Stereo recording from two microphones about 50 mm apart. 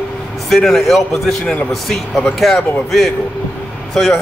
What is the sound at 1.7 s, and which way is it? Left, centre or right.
Speech, centre.